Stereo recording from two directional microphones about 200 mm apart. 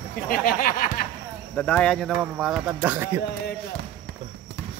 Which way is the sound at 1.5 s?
5° left (ahead or behind).